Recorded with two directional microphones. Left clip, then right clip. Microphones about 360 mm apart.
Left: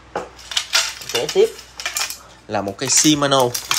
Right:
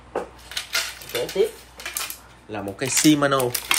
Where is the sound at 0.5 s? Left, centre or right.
Centre.